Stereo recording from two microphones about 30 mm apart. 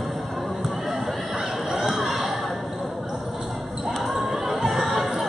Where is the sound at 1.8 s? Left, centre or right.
Centre.